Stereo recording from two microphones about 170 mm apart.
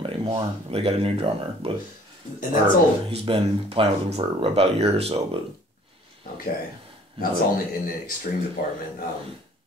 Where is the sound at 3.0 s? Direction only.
35° right (ahead or behind).